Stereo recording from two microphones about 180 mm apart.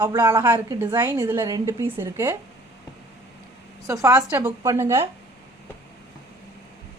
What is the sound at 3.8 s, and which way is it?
A man's voice, 20° right (ahead or behind).